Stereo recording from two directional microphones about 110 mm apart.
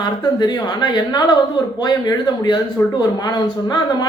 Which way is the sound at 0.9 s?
40° left (ahead or behind).